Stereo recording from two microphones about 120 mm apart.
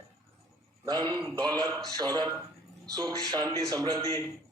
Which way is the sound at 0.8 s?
30° right (ahead or behind).